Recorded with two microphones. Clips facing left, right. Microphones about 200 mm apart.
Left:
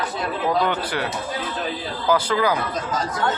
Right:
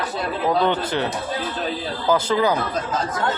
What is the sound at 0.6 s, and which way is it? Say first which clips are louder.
Speech: right 3 dB; 25° right (ahead or behind).